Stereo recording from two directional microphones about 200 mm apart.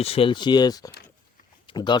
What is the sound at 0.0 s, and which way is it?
Speech, 30° left (ahead or behind).